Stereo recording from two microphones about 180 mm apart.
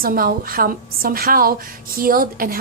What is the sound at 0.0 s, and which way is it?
A woman's voice, 55° right (ahead or behind).